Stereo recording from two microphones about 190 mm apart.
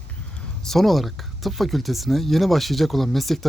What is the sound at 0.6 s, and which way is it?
Speech, centre (ahead or behind).